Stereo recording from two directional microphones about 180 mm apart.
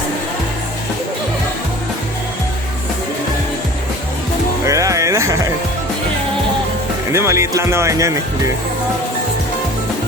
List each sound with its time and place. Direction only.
4.6 s music: 20° right (ahead or behind)
7.1 s speech: 15° right (ahead or behind)